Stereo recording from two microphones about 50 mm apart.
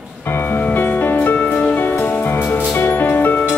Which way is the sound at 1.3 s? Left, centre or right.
Left.